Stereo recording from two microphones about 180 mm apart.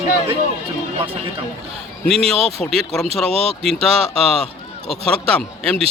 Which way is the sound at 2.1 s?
35° right (ahead or behind).